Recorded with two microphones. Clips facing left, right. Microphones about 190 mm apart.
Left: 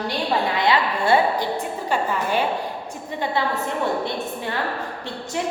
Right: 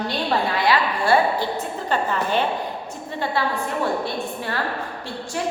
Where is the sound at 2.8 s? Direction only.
15° left (ahead or behind).